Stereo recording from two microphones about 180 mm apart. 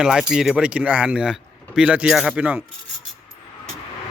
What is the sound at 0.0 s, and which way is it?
Speech, 5° right (ahead or behind).